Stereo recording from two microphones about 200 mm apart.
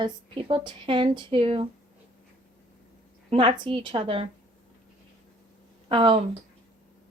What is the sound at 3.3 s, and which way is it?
A woman's voice, 25° right (ahead or behind).